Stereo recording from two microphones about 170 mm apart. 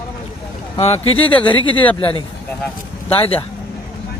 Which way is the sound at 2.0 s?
30° left (ahead or behind).